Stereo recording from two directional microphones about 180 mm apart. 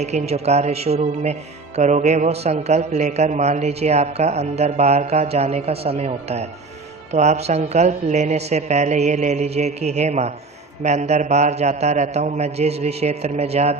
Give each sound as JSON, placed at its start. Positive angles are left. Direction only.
{"t": 0.0, "sound": "speech", "side_deg": -40}